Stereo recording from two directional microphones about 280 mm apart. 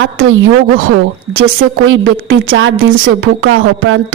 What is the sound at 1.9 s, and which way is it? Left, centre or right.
A woman's voice, right.